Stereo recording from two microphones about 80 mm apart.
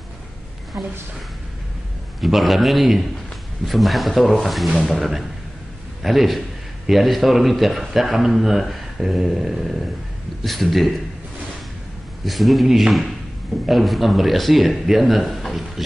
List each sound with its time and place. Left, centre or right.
0.7 s a woman's voice: right
2.1 s speech: centre
12.3 s speech: centre